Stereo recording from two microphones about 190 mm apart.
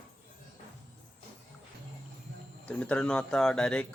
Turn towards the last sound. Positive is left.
turn(degrees=5)  # may be behind; listen again after turning